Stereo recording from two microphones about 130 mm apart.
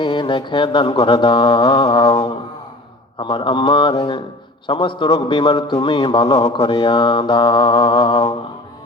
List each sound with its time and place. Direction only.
0.0 s a man's voice: 40° left (ahead or behind)
3.2 s a man's voice: 40° left (ahead or behind)